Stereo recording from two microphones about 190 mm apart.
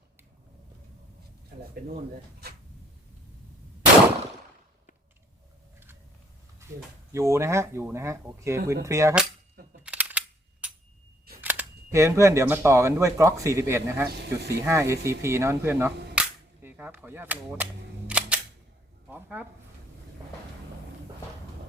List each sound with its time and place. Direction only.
7.1 s speech: 15° right (ahead or behind)
9.8 s a sound: 5° right (ahead or behind)
11.3 s speech: 10° right (ahead or behind)
14.2 s speech: 60° right (ahead or behind)
14.6 s speech: 15° right (ahead or behind)
16.6 s cap gun: 10° right (ahead or behind)
18.1 s single-lens reflex camera: 5° right (ahead or behind)
19.0 s a sound: 10° right (ahead or behind)